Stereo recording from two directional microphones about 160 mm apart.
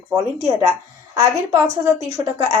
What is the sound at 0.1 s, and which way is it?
Speech, 20° right (ahead or behind).